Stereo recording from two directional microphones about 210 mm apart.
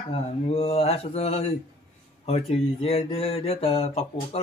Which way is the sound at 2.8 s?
25° left (ahead or behind).